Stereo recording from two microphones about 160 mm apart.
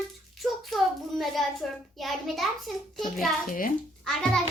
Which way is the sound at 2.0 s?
Centre (ahead or behind).